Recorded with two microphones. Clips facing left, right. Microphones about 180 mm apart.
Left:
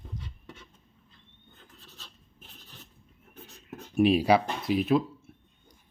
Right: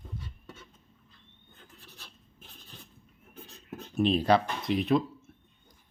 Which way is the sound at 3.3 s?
20° left (ahead or behind).